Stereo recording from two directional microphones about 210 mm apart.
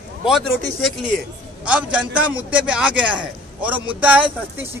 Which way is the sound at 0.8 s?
Centre (ahead or behind).